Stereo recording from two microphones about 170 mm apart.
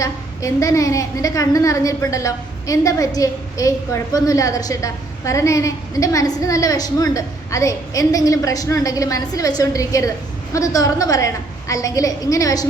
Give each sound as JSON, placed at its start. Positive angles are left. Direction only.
{"t": 0.0, "sound": "a woman's voice", "side_deg": 20}